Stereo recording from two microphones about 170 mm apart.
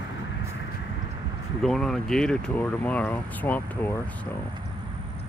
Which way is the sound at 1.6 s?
Centre (ahead or behind).